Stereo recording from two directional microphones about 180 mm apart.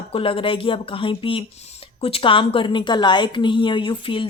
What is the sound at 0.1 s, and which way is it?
A woman's voice, 30° left (ahead or behind).